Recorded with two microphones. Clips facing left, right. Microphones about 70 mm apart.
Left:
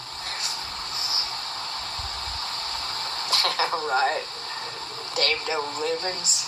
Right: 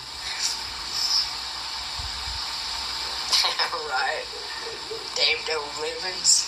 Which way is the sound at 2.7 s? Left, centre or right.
Left.